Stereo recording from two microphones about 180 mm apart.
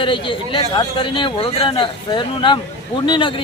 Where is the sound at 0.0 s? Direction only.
30° left (ahead or behind).